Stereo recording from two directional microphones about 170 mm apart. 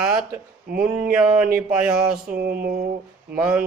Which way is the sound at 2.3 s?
60° right (ahead or behind).